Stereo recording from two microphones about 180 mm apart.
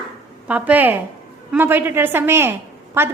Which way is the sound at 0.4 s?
10° right (ahead or behind).